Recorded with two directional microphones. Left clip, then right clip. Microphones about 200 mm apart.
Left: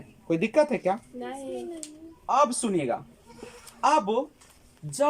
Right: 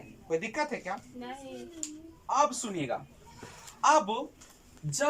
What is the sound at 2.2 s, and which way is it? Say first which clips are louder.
Speech: left 4 dB; 55° left (ahead or behind).